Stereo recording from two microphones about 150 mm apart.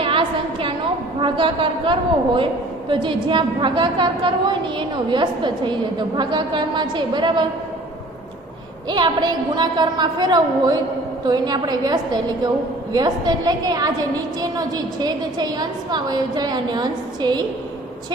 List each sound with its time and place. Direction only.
0.0 s a sound: 35° right (ahead or behind)
1.2 s a woman's voice: 35° right (ahead or behind)
8.9 s a woman's voice: 30° right (ahead or behind)